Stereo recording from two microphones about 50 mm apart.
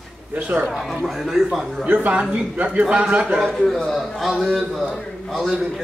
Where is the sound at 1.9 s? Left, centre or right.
Right.